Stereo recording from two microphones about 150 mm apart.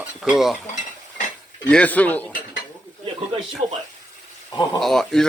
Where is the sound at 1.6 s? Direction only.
10° left (ahead or behind).